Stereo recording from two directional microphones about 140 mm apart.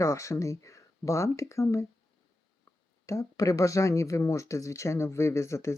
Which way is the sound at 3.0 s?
20° left (ahead or behind).